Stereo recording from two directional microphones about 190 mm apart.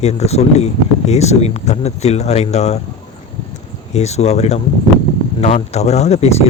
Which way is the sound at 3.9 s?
35° left (ahead or behind).